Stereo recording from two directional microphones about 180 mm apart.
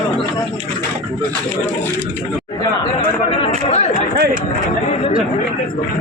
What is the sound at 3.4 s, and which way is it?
Chatter, 35° left (ahead or behind).